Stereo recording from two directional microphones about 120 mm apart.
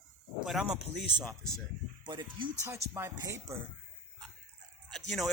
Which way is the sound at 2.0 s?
40° right (ahead or behind).